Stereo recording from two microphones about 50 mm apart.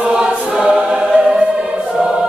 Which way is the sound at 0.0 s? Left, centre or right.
Centre.